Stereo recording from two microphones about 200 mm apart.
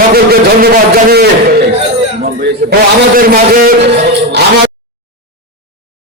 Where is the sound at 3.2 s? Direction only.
45° right (ahead or behind).